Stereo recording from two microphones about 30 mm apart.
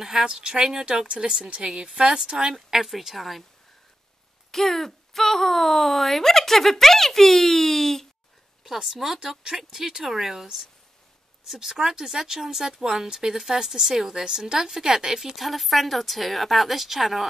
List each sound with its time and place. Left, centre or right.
0.0 s speech: right
1.6 s speech: centre
2.5 s speech: centre
3.2 s speech: centre
4.5 s speech: centre
8.6 s speech: centre
15.3 s speech: centre